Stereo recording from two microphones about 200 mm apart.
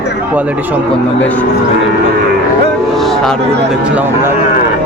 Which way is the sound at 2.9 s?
Centre (ahead or behind).